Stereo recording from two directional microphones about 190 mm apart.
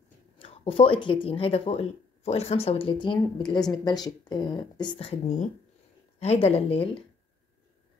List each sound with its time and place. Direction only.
0.4 s speech: 30° left (ahead or behind)